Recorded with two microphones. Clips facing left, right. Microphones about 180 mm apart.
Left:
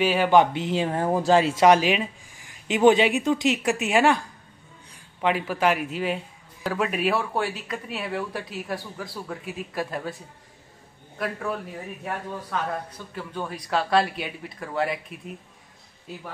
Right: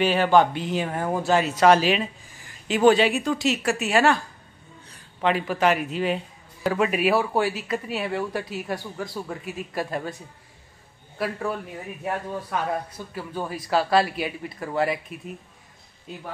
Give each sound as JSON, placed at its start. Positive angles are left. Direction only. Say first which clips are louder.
{"t": 0.0, "sound": "speech", "louder": "even", "side_deg": 5}
{"t": 0.3, "sound": "speech", "louder": "even", "side_deg": 20}
{"t": 1.7, "sound": "speech", "louder": "even", "side_deg": 15}
{"t": 12.0, "sound": "speech", "louder": "right 5 dB", "side_deg": -15}